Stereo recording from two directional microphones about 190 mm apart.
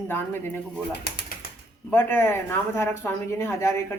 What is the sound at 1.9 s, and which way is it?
A woman's voice, 10° left (ahead or behind).